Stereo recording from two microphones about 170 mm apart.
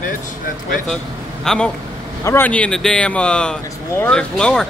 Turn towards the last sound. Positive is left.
turn(degrees=5)  # may be behind; listen again after turning